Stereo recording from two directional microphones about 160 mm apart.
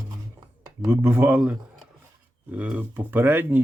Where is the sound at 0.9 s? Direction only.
15° right (ahead or behind).